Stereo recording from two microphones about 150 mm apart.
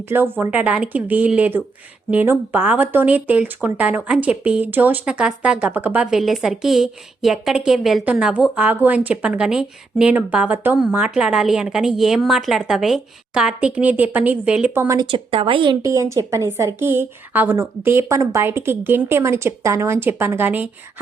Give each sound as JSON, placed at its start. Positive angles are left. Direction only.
{"t": 0.1, "sound": "speech", "side_deg": -15}
{"t": 15.0, "sound": "speech", "side_deg": -35}
{"t": 15.8, "sound": "speech", "side_deg": -20}